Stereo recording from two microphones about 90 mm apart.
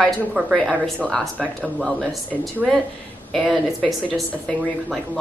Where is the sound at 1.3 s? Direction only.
15° right (ahead or behind).